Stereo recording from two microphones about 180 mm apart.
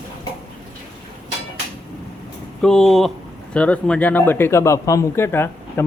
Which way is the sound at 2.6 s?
5° left (ahead or behind).